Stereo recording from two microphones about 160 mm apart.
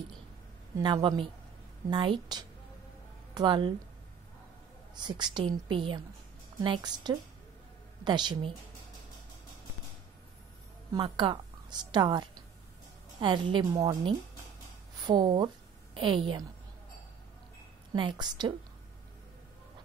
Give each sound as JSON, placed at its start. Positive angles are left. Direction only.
{"t": 0.7, "sound": "a woman's voice", "side_deg": -25}
{"t": 4.9, "sound": "a woman's voice", "side_deg": -25}
{"t": 10.9, "sound": "a woman's voice", "side_deg": -30}
{"t": 17.9, "sound": "a woman's voice", "side_deg": -30}